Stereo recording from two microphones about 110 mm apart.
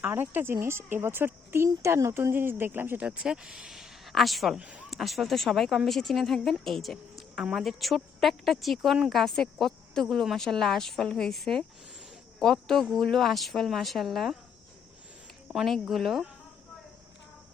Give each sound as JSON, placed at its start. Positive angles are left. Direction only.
{"t": 0.0, "sound": "speech", "side_deg": -20}
{"t": 4.9, "sound": "speech", "side_deg": 0}
{"t": 15.4, "sound": "speech", "side_deg": 0}